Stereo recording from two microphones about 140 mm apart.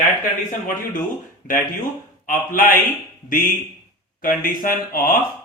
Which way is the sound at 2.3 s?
70° left (ahead or behind).